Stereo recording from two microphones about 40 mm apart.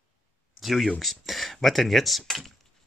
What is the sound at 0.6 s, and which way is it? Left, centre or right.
Speech, centre.